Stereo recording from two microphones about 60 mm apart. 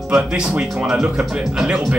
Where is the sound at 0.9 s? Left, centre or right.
Centre.